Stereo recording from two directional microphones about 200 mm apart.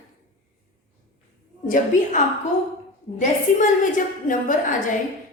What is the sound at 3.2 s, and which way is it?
A woman's voice, 40° left (ahead or behind).